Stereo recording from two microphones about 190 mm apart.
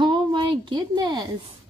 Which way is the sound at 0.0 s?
25° right (ahead or behind).